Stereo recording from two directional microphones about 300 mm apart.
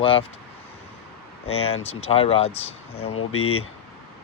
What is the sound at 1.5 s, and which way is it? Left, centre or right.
Speech, centre.